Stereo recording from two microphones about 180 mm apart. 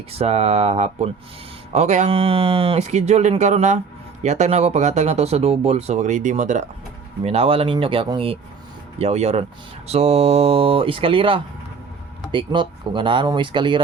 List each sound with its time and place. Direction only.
0.1 s speech: 35° right (ahead or behind)